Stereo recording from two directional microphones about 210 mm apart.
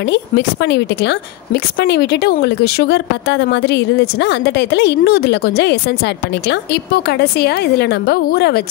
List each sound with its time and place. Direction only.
0.0 s a woman's voice: 55° left (ahead or behind)